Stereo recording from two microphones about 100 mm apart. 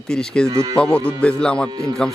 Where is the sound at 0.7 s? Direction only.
15° left (ahead or behind).